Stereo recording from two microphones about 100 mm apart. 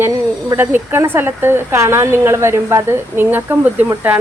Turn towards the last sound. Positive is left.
turn(degrees=-20)  # may be behind; listen again after turning